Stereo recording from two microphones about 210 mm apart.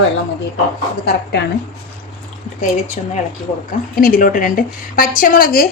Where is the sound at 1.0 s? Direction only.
50° left (ahead or behind).